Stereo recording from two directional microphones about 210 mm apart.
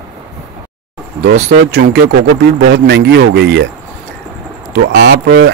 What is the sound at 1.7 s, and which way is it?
Speech, 55° right (ahead or behind).